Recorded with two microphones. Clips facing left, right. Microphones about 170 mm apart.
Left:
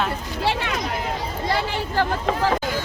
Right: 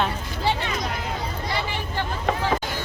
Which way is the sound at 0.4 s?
65° left (ahead or behind).